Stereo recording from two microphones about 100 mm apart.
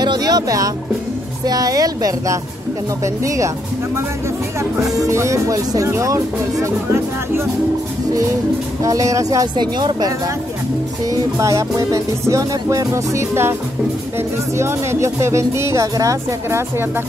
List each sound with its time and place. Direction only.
0.0 s music: 45° right (ahead or behind)
1.4 s speech: 40° right (ahead or behind)
8.8 s speech: 35° right (ahead or behind)